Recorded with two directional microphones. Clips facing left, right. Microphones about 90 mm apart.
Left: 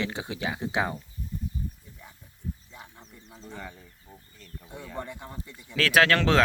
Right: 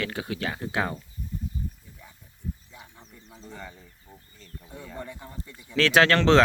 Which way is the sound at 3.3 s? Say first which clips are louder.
Left 1 dB; centre (ahead or behind).